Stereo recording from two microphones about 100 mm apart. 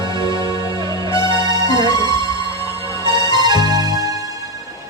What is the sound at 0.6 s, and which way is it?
Music, 35° left (ahead or behind).